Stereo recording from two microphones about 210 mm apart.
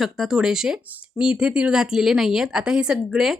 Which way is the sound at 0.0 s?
Centre (ahead or behind).